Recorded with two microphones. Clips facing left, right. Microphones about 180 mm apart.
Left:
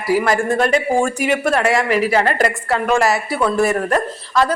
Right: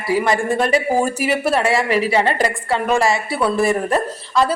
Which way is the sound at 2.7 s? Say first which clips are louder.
Even; centre (ahead or behind).